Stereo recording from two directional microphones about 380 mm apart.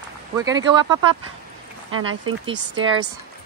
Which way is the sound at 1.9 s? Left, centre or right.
Right.